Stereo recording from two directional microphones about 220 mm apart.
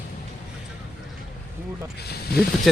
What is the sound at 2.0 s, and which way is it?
Snake, 45° left (ahead or behind).